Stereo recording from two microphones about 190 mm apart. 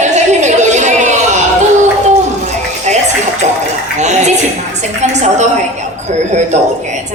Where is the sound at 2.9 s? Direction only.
40° right (ahead or behind).